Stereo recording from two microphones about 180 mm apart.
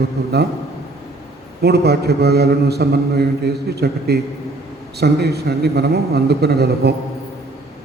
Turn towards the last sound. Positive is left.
turn(degrees=-65)  # may be behind; listen again after turning